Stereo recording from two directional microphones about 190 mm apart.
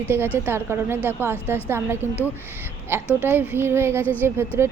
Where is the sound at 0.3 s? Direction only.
10° right (ahead or behind).